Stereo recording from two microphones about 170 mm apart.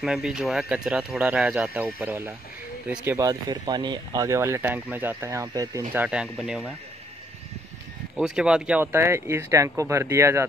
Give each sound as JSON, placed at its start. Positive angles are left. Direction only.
{"t": 0.0, "sound": "speech", "side_deg": 0}
{"t": 6.0, "sound": "speech", "side_deg": -5}
{"t": 8.2, "sound": "speech", "side_deg": -5}